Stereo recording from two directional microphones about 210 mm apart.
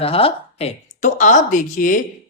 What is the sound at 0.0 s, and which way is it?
Speech, 25° left (ahead or behind).